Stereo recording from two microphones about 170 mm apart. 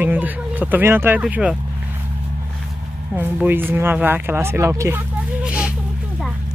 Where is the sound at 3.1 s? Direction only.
10° right (ahead or behind).